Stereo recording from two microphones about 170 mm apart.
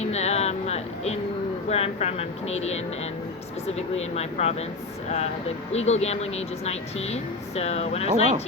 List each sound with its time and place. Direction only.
0.0 s a sound: 40° left (ahead or behind)
1.7 s a woman's voice: 40° left (ahead or behind)
8.0 s speech: 45° right (ahead or behind)